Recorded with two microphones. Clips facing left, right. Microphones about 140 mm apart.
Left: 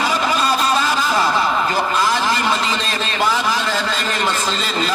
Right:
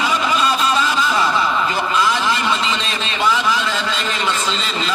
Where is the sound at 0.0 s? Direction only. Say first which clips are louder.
Even; 40° left (ahead or behind).